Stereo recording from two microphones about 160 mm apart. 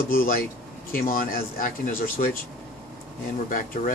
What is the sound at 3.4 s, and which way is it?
Speech, 60° left (ahead or behind).